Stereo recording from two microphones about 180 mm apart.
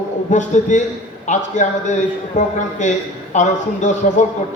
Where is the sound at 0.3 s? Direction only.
45° left (ahead or behind).